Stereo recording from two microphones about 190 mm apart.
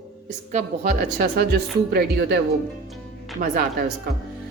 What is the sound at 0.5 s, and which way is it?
A woman's voice, 45° right (ahead or behind).